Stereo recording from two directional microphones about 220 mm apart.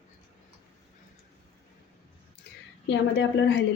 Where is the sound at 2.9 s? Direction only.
55° left (ahead or behind).